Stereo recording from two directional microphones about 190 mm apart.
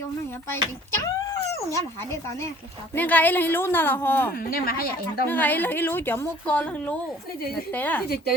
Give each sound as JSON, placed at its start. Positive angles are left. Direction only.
{"t": 0.5, "sound": "a sound", "side_deg": 15}
{"t": 2.9, "sound": "a woman's voice", "side_deg": 10}
{"t": 4.4, "sound": "a woman's voice", "side_deg": 50}
{"t": 5.3, "sound": "a woman's voice", "side_deg": 10}